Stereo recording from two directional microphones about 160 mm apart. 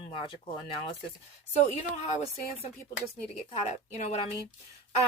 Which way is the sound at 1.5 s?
45° left (ahead or behind).